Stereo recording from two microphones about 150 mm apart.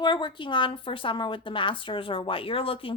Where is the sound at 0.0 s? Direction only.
30° left (ahead or behind).